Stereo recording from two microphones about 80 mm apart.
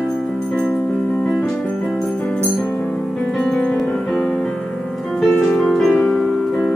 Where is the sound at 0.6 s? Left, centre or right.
Centre.